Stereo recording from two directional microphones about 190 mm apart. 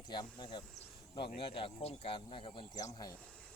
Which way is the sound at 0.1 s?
25° left (ahead or behind).